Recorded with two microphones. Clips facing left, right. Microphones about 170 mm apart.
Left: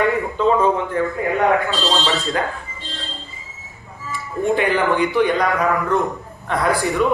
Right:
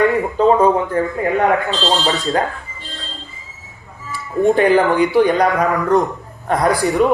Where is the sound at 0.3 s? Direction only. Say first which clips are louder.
Right 4 dB; 40° right (ahead or behind).